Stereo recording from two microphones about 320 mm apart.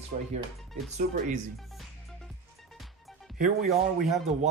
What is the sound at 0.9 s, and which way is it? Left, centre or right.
Speech, right.